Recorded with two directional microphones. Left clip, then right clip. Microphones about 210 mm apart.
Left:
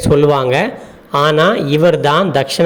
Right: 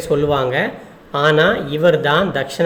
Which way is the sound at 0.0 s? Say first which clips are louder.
Left 5 dB; 30° left (ahead or behind).